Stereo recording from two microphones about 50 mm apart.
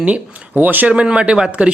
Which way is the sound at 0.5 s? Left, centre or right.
Right.